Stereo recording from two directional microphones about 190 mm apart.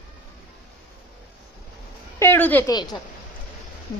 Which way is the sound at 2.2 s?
10° left (ahead or behind).